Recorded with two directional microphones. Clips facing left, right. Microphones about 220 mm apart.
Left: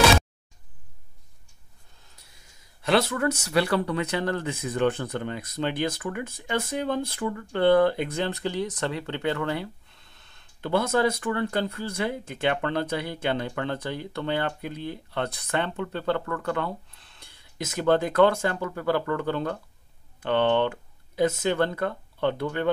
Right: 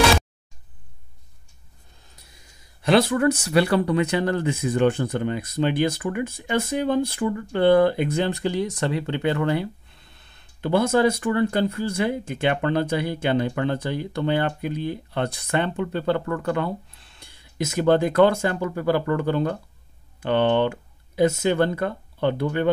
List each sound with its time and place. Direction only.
2.8 s speech: 15° right (ahead or behind)